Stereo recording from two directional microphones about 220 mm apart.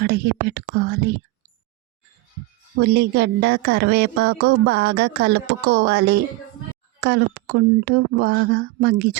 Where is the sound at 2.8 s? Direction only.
45° right (ahead or behind).